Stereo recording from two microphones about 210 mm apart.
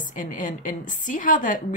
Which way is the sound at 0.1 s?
40° left (ahead or behind).